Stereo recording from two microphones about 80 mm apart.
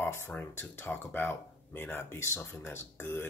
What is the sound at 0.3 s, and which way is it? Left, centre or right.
Speech, left.